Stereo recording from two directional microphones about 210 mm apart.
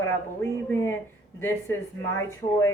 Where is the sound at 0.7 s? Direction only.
10° left (ahead or behind).